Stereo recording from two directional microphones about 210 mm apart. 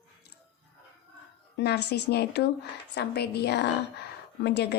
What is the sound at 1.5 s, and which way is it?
A woman's voice, 50° left (ahead or behind).